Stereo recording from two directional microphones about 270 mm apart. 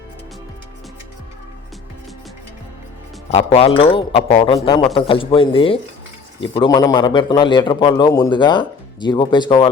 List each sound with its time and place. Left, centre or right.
3.3 s a man's voice: left